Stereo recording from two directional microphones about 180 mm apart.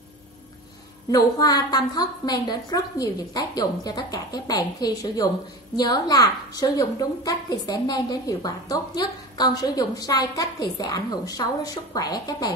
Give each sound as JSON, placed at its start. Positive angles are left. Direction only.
{"t": 1.1, "sound": "a woman's voice", "side_deg": 20}